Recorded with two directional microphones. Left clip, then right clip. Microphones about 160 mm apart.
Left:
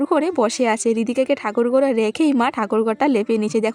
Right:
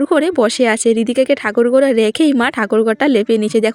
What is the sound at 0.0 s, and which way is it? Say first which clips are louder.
Speech: right 5 dB; 30° right (ahead or behind).